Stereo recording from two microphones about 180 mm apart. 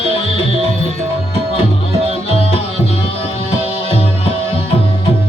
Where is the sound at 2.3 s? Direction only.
30° left (ahead or behind).